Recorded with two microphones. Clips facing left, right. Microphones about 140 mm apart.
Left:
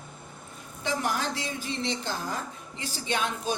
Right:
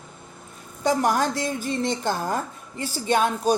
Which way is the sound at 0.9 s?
45° right (ahead or behind).